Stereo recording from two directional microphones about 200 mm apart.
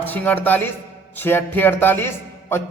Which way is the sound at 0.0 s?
10° left (ahead or behind).